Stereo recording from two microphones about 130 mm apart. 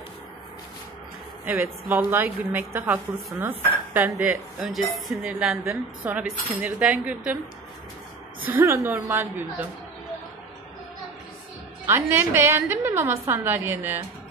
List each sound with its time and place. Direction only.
1.4 s a woman's voice: 15° right (ahead or behind)
4.6 s a woman's voice: centre (ahead or behind)
8.5 s a woman's voice: 20° right (ahead or behind)
11.8 s a woman's voice: 15° right (ahead or behind)